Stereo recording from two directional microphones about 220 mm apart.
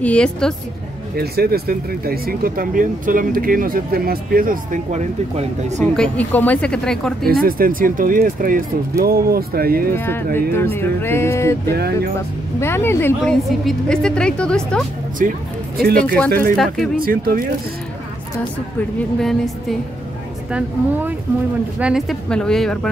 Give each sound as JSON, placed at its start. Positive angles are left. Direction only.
{"t": 0.0, "sound": "a woman's voice", "side_deg": 5}
{"t": 1.1, "sound": "speech", "side_deg": -45}
{"t": 5.8, "sound": "a woman's voice", "side_deg": 5}
{"t": 7.4, "sound": "speech", "side_deg": -40}
{"t": 9.9, "sound": "speech", "side_deg": 10}
{"t": 11.7, "sound": "speech", "side_deg": -45}
{"t": 12.5, "sound": "a woman's voice", "side_deg": 10}
{"t": 15.2, "sound": "speech", "side_deg": -40}
{"t": 16.5, "sound": "a woman's voice", "side_deg": 0}
{"t": 17.0, "sound": "speech", "side_deg": -40}
{"t": 19.1, "sound": "a woman's voice", "side_deg": 0}
{"t": 21.7, "sound": "a woman's voice", "side_deg": -5}